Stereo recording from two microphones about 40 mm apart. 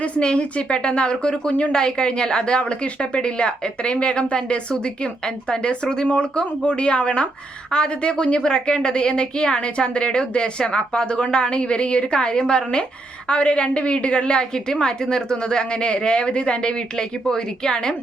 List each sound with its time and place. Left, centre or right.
0.0 s a woman's voice: left